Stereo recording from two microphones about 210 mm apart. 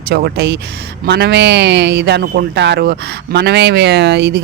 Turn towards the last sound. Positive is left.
turn(degrees=-50)  # may be behind; listen again after turning